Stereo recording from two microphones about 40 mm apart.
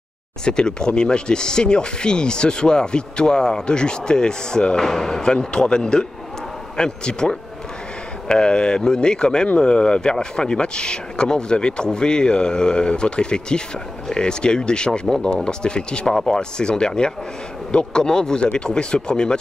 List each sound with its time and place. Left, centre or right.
0.5 s speech: left